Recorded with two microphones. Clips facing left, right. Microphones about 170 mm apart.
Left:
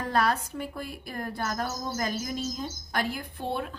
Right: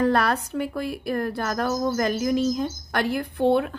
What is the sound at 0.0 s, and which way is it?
Speech, 65° right (ahead or behind).